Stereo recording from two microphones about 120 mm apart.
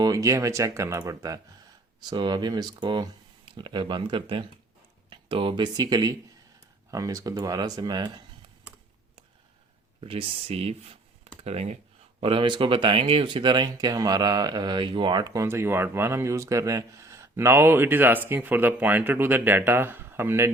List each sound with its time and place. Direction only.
0.0 s speech: 30° right (ahead or behind)
10.0 s speech: 50° right (ahead or behind)
12.2 s speech: 45° right (ahead or behind)
15.4 s speech: 20° right (ahead or behind)